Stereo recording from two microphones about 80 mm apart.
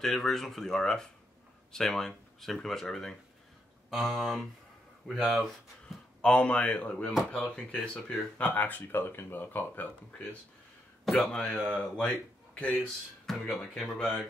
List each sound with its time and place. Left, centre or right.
0.0 s speech: centre
6.2 s speech: centre
11.1 s speech: centre